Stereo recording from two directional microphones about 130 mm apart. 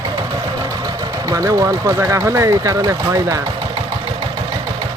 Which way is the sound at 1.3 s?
25° right (ahead or behind).